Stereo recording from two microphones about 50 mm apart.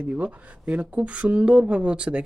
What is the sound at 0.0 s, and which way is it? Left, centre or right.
Speech, right.